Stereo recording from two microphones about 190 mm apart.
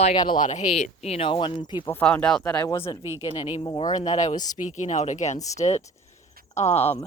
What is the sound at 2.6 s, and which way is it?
Speech, 15° left (ahead or behind).